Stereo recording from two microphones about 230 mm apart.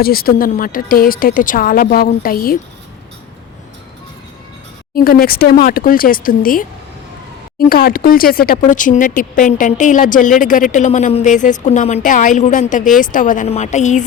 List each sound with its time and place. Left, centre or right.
0.0 s speech: left
4.9 s speech: left
7.7 s speech: left